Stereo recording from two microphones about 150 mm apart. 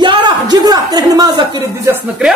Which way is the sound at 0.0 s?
30° right (ahead or behind).